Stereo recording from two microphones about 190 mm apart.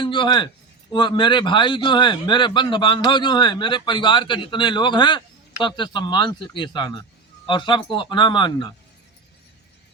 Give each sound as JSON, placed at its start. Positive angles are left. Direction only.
{"t": 0.0, "sound": "a man's voice", "side_deg": 25}